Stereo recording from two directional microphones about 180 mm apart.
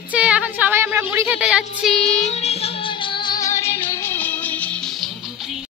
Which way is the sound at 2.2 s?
40° left (ahead or behind).